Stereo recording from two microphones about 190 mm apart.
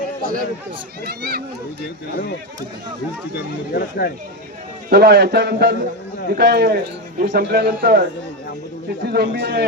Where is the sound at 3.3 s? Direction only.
55° left (ahead or behind).